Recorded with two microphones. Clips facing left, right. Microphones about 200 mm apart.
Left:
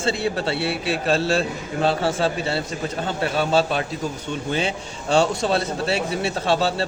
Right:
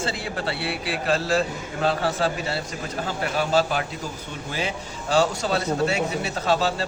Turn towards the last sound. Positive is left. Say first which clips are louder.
# left 2 dB
turn(degrees=30)  # may be behind; listen again after turning